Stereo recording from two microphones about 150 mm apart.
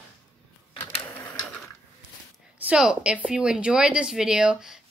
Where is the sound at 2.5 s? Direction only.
5° right (ahead or behind).